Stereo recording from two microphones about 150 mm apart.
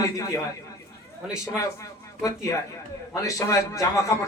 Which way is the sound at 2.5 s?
25° left (ahead or behind).